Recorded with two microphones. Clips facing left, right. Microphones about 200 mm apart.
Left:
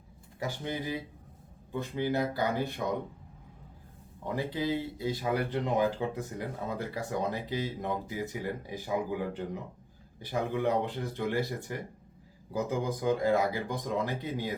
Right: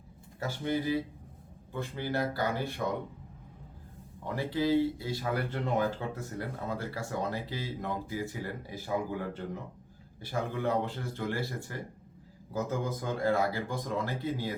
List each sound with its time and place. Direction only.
0.3 s speech: 15° left (ahead or behind)
4.4 s speech: 20° left (ahead or behind)